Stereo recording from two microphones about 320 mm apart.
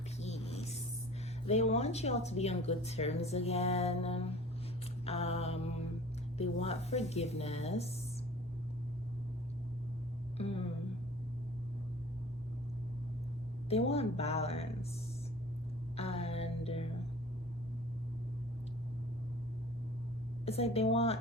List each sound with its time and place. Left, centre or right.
0.2 s a sound: centre
1.5 s a woman's voice: centre
5.0 s mantra: centre
6.3 s a woman's voice: centre
10.3 s speech: centre
13.7 s a woman's voice: centre
16.0 s music: centre
20.4 s a woman's voice: centre